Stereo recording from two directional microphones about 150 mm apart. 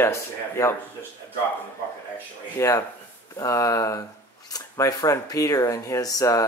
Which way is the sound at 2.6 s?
20° left (ahead or behind).